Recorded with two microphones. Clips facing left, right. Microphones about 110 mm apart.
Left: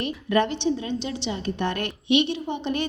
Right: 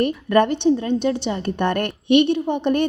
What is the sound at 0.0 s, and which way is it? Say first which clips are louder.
A woman's voice: right 6 dB; 50° right (ahead or behind).